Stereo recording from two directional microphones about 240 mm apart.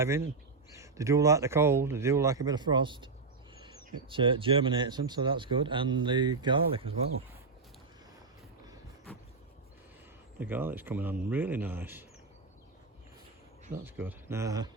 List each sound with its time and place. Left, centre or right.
0.0 s speech: centre
4.1 s speech: right
10.4 s speech: centre
13.8 s speech: centre